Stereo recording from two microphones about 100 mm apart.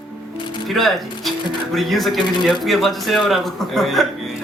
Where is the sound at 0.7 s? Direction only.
Centre (ahead or behind).